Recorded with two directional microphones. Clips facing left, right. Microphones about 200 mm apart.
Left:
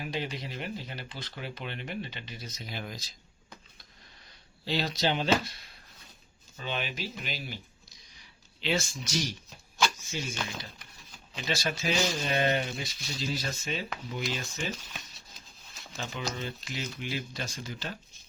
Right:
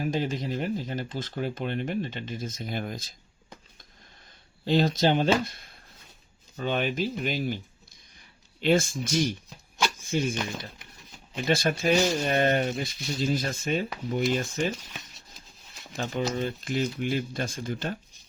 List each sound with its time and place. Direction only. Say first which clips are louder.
0.0 s speech: right 7 dB; 45° right (ahead or behind)
4.6 s speech: right 7 dB; 50° right (ahead or behind)
8.6 s speech: right 8 dB; 50° right (ahead or behind)
11.3 s speech: right 7 dB; 55° right (ahead or behind)
16.0 s speech: right 8 dB; 50° right (ahead or behind)